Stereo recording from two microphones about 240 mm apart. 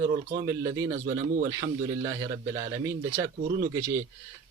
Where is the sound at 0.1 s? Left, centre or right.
Right.